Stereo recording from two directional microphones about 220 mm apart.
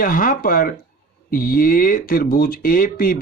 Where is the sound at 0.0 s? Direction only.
40° left (ahead or behind).